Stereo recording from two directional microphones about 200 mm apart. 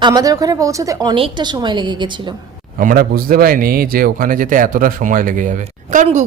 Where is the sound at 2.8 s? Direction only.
45° right (ahead or behind).